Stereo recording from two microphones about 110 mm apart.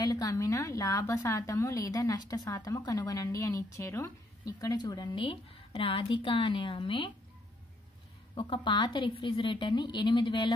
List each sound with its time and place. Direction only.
0.0 s a woman's voice: 35° left (ahead or behind)
5.2 s a woman's voice: 55° left (ahead or behind)
8.4 s a woman's voice: 50° left (ahead or behind)